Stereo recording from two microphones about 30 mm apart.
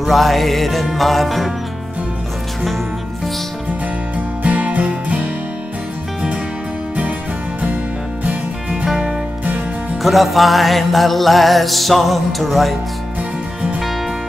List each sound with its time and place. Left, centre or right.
0.0 s music: centre
4.4 s music: right
8.8 s music: centre
10.0 s music: centre